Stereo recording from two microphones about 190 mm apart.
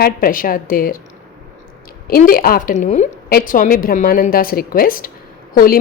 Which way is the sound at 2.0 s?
50° left (ahead or behind).